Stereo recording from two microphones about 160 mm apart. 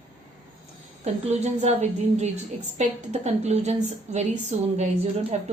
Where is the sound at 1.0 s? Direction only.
45° right (ahead or behind).